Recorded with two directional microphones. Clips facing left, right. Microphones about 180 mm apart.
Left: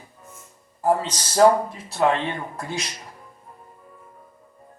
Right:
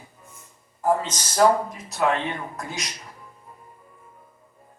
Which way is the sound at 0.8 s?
30° left (ahead or behind).